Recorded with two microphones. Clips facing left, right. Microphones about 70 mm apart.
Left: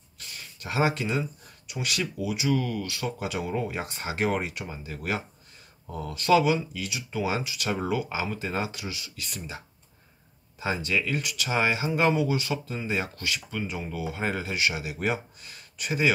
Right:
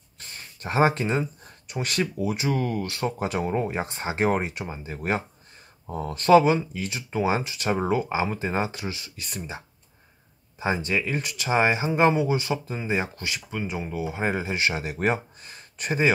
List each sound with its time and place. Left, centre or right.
0.2 s a sound: right
1.7 s speech: right
10.6 s speech: right